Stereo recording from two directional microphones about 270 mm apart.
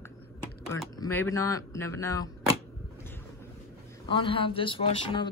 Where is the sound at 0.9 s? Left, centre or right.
Centre.